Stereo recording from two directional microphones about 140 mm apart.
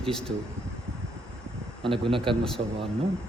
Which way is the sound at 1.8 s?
40° right (ahead or behind).